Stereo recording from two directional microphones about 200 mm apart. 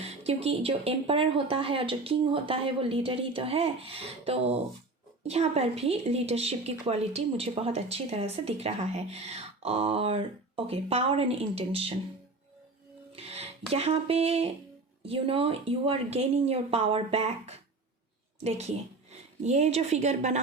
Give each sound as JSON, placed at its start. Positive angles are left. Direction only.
{"t": 0.0, "sound": "speech", "side_deg": -30}
{"t": 13.1, "sound": "speech", "side_deg": -30}